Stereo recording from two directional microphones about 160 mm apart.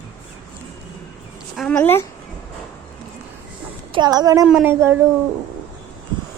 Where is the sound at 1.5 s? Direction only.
5° left (ahead or behind).